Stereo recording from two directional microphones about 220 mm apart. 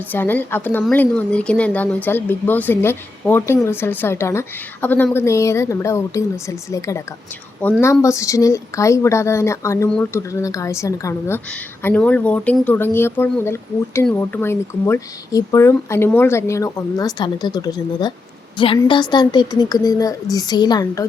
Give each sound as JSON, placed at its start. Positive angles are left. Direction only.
{"t": 0.1, "sound": "a woman's voice", "side_deg": 10}